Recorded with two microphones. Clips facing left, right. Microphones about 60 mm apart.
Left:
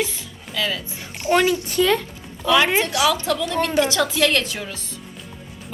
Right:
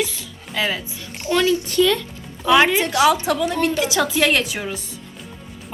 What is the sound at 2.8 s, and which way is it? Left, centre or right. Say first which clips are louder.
Speech: right 3 dB; right.